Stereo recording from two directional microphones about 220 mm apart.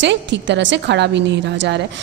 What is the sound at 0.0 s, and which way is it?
A woman's voice, 55° right (ahead or behind).